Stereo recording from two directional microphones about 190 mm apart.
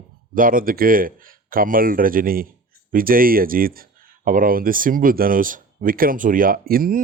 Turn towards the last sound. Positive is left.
turn(degrees=-50)  # may be behind; listen again after turning